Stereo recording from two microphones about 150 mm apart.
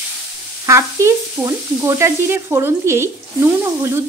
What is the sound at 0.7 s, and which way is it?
Stir, 20° right (ahead or behind).